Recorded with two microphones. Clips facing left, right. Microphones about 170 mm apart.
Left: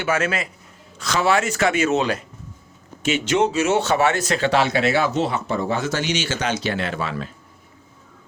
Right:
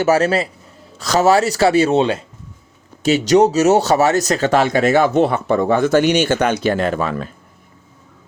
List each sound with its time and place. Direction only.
0.0 s speech: 35° right (ahead or behind)